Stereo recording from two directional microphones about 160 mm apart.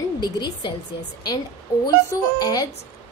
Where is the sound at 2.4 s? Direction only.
25° left (ahead or behind).